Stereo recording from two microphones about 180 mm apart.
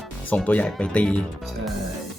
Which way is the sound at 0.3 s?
10° left (ahead or behind).